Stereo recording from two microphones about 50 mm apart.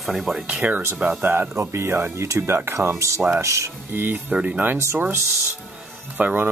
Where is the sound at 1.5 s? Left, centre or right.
Right.